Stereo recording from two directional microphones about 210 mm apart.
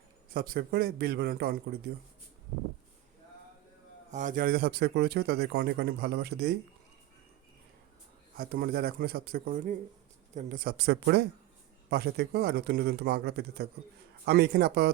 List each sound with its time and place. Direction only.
0.3 s speech: 45° right (ahead or behind)
4.1 s speech: 35° right (ahead or behind)
8.4 s speech: 45° right (ahead or behind)